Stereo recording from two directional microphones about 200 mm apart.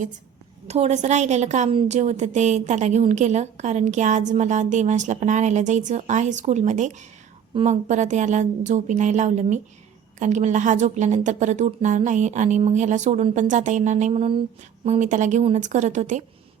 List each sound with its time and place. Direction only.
0.7 s a woman's voice: 35° right (ahead or behind)